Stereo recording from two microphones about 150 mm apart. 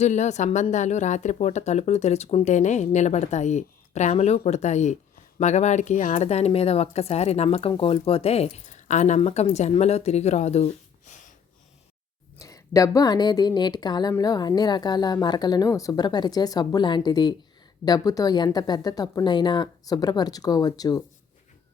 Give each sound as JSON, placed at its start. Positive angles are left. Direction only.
{"t": 0.0, "sound": "speech", "side_deg": 50}
{"t": 12.4, "sound": "a woman's voice", "side_deg": 20}